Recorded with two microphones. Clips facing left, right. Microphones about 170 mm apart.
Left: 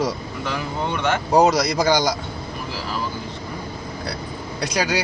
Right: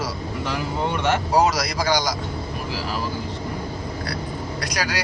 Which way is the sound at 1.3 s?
25° left (ahead or behind).